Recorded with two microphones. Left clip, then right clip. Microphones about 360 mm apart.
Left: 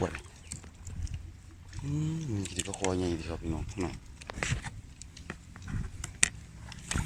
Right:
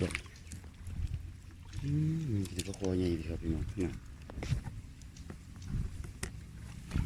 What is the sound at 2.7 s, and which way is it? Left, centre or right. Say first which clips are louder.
Speech: left 3 dB; left.